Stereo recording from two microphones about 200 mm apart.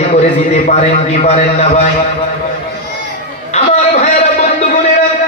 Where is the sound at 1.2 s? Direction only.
30° left (ahead or behind).